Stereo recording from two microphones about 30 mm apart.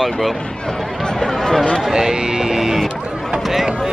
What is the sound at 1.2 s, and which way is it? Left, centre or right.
Speech, centre.